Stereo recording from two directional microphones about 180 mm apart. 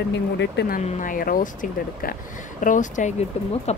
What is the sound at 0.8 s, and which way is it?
Speech, 45° left (ahead or behind).